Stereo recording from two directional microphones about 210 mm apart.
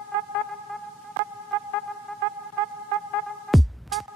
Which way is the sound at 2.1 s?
Centre (ahead or behind).